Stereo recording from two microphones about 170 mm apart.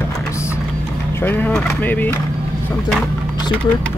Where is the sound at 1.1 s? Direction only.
10° left (ahead or behind).